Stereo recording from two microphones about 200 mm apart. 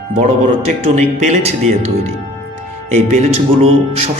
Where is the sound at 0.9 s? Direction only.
35° right (ahead or behind).